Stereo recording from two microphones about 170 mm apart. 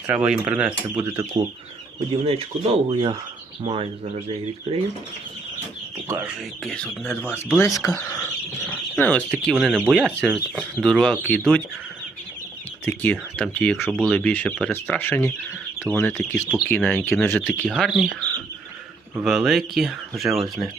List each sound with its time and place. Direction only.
0.1 s speech: 10° right (ahead or behind)
0.9 s speech: 20° right (ahead or behind)
2.0 s speech: 35° right (ahead or behind)
6.1 s speech: 15° right (ahead or behind)
6.7 s speech: 5° left (ahead or behind)
9.0 s speech: 10° left (ahead or behind)
12.8 s speech: 10° left (ahead or behind)
17.7 s speech: centre (ahead or behind)
19.2 s speech: centre (ahead or behind)